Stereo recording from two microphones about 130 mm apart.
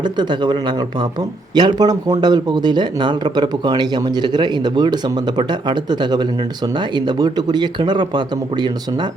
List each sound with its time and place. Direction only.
0.0 s speech: 35° right (ahead or behind)